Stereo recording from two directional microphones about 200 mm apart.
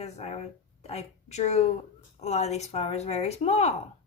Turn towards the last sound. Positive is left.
turn(degrees=30)  # may be behind; listen again after turning